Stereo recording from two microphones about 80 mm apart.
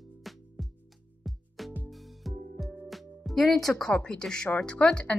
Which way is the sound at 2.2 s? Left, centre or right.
Centre.